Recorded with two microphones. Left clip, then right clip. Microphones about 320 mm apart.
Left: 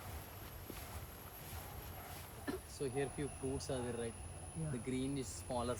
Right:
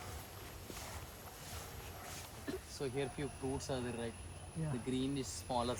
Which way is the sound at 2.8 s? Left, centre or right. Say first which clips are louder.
Even; centre.